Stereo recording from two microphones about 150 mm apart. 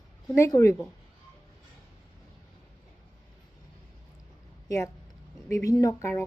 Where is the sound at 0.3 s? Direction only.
20° left (ahead or behind).